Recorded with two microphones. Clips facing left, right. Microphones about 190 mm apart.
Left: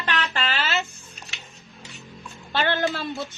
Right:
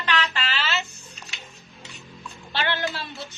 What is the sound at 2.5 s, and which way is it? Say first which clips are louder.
Speech: left 4 dB; 45° left (ahead or behind).